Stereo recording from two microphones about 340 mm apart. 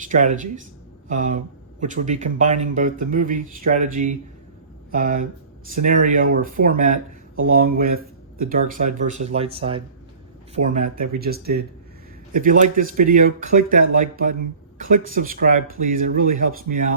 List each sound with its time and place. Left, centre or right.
0.0 s speech: right